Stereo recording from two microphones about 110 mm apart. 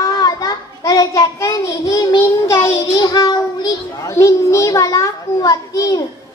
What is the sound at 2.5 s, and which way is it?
A child's voice, 45° left (ahead or behind).